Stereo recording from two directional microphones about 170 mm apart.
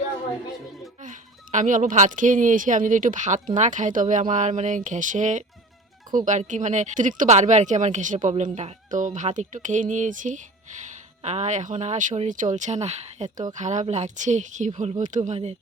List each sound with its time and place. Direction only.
1.5 s speech: 50° right (ahead or behind)